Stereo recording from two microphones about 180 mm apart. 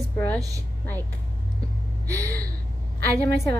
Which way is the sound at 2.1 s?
15° right (ahead or behind).